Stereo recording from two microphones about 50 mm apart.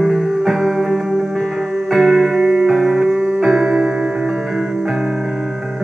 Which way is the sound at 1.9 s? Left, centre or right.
Centre.